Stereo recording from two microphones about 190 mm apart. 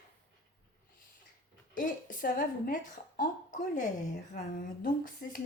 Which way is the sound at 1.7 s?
45° left (ahead or behind).